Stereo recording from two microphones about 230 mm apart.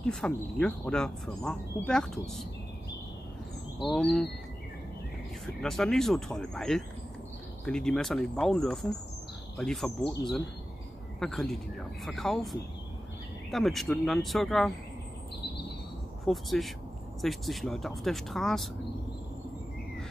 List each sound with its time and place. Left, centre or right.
0.0 s speech: centre
3.8 s speech: centre
5.6 s speech: centre
11.1 s speech: centre
16.3 s speech: centre